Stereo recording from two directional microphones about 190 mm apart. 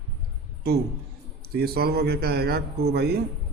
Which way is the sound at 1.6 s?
55° right (ahead or behind).